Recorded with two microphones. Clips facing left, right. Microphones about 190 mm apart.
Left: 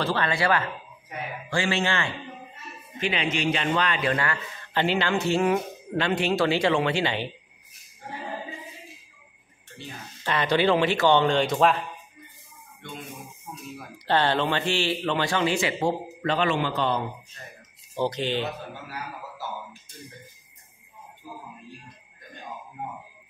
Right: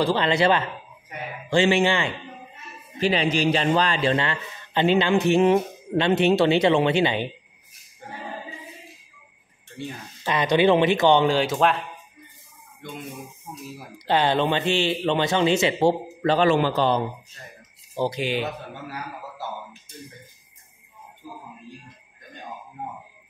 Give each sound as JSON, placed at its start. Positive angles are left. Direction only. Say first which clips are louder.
{"t": 0.0, "sound": "a man's voice", "louder": "right 5 dB", "side_deg": -20}
{"t": 3.0, "sound": "a man's voice", "louder": "right 5 dB", "side_deg": -35}
{"t": 10.2, "sound": "speech", "louder": "right 3 dB", "side_deg": -15}
{"t": 11.2, "sound": "speech", "louder": "right 1 dB", "side_deg": -5}
{"t": 13.9, "sound": "a man's voice", "louder": "right 2 dB", "side_deg": -15}
{"t": 17.9, "sound": "speech", "louder": "right 1 dB", "side_deg": -10}